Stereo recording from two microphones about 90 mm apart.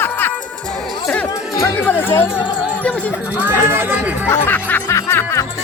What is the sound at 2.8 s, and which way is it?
Speech, 15° left (ahead or behind).